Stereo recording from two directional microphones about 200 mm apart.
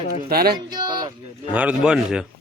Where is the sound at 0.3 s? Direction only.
50° right (ahead or behind).